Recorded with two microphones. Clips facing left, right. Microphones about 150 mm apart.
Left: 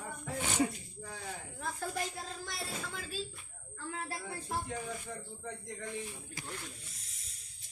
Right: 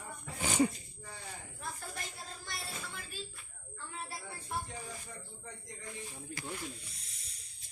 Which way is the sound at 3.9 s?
90° left.